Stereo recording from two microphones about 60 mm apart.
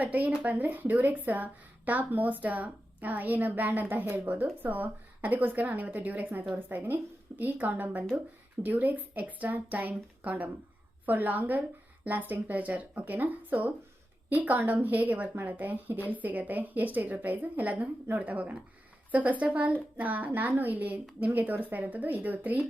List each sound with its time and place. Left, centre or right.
0.0 s a woman's voice: right